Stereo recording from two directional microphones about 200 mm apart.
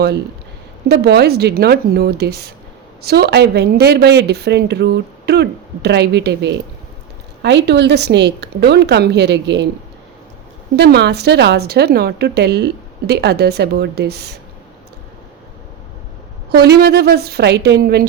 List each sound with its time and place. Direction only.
0.9 s a woman's voice: 55° right (ahead or behind)
10.8 s a woman's voice: 55° right (ahead or behind)
16.5 s a woman's voice: 55° right (ahead or behind)